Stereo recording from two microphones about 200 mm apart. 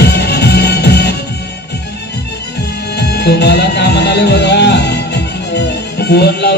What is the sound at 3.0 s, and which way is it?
Music, 55° left (ahead or behind).